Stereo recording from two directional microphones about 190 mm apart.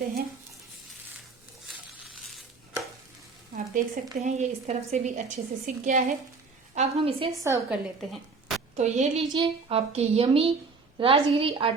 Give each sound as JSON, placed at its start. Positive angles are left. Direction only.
{"t": 3.5, "sound": "speech", "side_deg": -40}
{"t": 6.7, "sound": "speech", "side_deg": -30}
{"t": 7.4, "sound": "a woman's voice", "side_deg": -15}
{"t": 8.1, "sound": "a sound", "side_deg": 0}
{"t": 8.7, "sound": "a woman's voice", "side_deg": -35}